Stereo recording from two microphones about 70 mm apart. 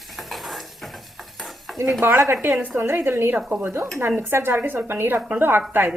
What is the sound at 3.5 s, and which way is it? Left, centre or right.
Stir, right.